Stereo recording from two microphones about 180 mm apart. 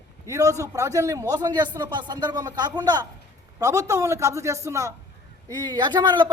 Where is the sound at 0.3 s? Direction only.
15° right (ahead or behind).